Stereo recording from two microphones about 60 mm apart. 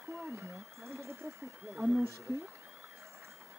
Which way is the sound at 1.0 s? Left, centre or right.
Right.